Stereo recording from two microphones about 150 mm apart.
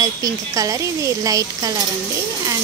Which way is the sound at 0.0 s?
25° right (ahead or behind).